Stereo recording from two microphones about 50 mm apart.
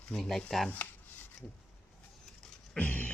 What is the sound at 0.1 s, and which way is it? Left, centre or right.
Speech, centre.